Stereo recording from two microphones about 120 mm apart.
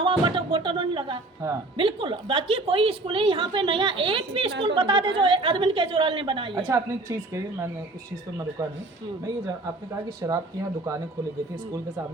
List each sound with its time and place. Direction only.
0.0 s a woman's voice: 45° right (ahead or behind)
6.7 s speech: 25° right (ahead or behind)
10.2 s speech: 30° right (ahead or behind)